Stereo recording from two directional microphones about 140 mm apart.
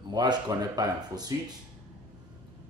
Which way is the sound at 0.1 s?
30° right (ahead or behind).